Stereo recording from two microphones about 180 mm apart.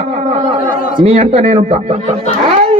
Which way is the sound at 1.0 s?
35° right (ahead or behind).